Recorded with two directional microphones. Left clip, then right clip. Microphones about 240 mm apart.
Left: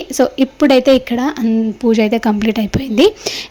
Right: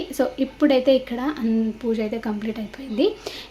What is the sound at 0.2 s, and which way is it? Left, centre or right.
A woman's voice, left.